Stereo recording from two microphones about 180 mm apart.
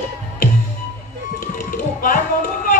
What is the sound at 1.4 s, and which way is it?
Music, 45° left (ahead or behind).